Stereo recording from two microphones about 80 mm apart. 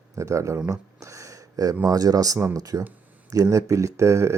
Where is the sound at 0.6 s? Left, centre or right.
Right.